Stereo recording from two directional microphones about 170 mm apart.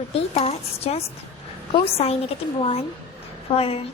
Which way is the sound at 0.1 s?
35° left (ahead or behind).